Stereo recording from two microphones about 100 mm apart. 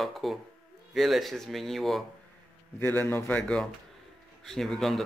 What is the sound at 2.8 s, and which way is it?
A man's voice, 25° left (ahead or behind).